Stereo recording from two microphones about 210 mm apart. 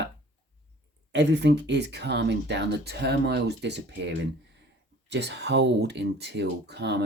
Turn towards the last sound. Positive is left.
turn(degrees=-55)  # may be behind; listen again after turning